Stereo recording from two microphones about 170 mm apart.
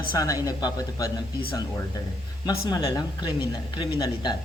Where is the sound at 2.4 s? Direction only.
25° left (ahead or behind).